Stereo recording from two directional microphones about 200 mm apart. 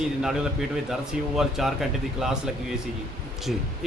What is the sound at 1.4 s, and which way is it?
Speech, centre (ahead or behind).